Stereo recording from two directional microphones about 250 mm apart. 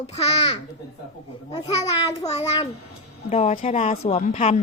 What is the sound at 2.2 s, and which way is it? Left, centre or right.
A woman's voice, left.